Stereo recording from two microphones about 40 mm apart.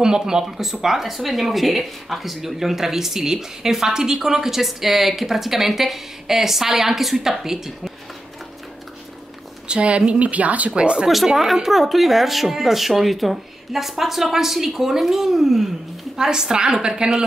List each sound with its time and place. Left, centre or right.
0.0 s speech: centre
9.7 s a woman's voice: right
10.8 s speech: right
11.5 s speech: centre